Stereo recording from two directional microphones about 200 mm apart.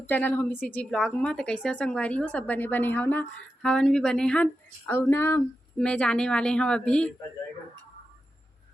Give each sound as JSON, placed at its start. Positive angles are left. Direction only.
{"t": 0.0, "sound": "a woman's voice", "side_deg": 10}